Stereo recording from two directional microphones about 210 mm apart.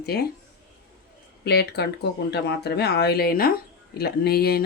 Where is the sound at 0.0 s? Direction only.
50° left (ahead or behind).